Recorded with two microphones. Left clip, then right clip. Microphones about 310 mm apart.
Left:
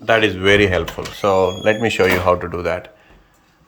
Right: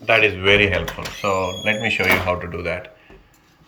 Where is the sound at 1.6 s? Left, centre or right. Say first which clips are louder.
Left 4 dB; left.